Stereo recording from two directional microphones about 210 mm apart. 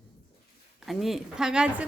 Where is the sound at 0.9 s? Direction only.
Centre (ahead or behind).